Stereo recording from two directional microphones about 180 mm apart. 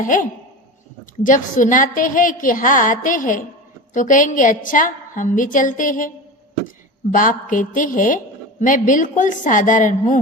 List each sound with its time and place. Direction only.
0.0 s a woman's voice: 45° left (ahead or behind)
7.1 s a woman's voice: 45° left (ahead or behind)